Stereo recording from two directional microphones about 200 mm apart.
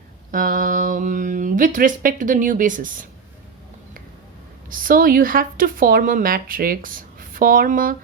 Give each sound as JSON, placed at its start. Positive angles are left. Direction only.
{"t": 0.3, "sound": "mantra", "side_deg": -40}
{"t": 4.7, "sound": "speech", "side_deg": -45}